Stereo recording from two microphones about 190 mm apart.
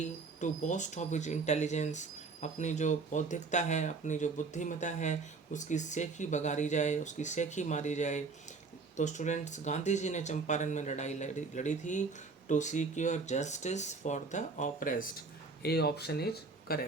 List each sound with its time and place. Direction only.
0.0 s speech: 40° left (ahead or behind)
15.6 s speech: 55° left (ahead or behind)